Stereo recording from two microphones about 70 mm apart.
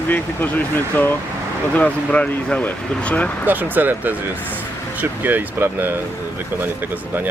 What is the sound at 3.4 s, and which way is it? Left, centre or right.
Speech, right.